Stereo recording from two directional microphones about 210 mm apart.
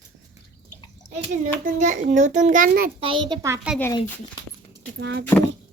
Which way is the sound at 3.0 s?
25° right (ahead or behind).